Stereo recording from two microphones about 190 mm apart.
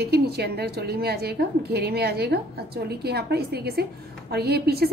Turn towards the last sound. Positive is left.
turn(degrees=-55)  # may be behind; listen again after turning